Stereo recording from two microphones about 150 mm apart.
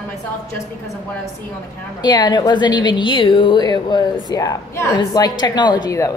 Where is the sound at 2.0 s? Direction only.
30° left (ahead or behind).